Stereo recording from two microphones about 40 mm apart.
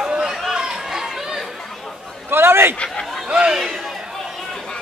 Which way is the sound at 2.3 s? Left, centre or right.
Right.